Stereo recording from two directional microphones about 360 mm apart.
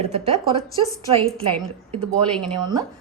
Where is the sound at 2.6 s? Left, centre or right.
Centre.